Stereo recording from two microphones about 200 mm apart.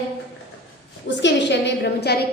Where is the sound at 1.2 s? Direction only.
60° left (ahead or behind).